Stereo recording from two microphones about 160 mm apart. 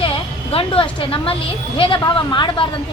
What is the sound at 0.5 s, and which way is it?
A woman's voice, 35° left (ahead or behind).